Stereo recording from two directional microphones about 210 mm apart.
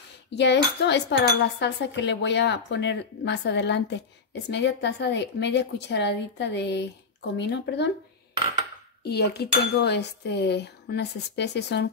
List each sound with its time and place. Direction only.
0.3 s speech: 55° left (ahead or behind)
9.0 s speech: 50° left (ahead or behind)